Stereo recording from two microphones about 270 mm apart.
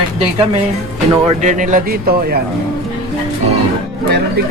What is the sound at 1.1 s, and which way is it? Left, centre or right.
Speech, right.